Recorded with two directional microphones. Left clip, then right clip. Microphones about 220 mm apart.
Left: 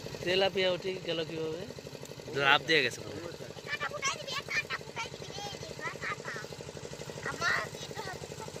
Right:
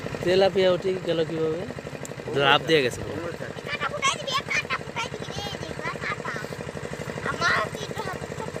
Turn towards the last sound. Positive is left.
turn(degrees=-45)  # may be behind; listen again after turning